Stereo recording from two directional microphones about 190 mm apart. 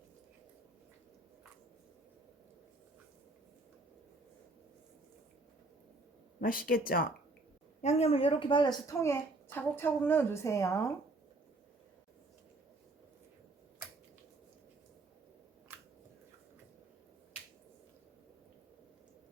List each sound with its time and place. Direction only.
6.4 s speech: 50° left (ahead or behind)
7.8 s a woman's voice: 35° left (ahead or behind); by 10.9 s 15° left (ahead or behind)